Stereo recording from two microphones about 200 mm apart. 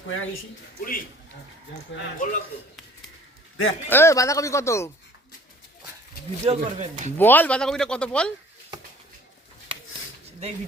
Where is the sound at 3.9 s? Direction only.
15° left (ahead or behind).